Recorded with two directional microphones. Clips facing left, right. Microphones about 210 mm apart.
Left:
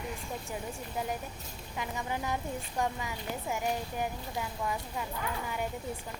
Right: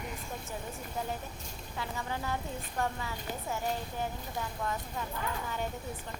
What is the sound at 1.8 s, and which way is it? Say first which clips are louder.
A woman's voice: left 2 dB; 15° left (ahead or behind).